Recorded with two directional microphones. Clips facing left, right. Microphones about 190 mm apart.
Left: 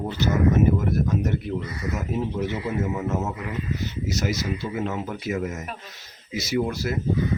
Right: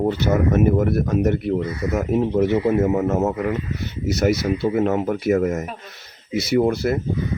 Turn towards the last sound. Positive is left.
turn(degrees=-60)  # may be behind; listen again after turning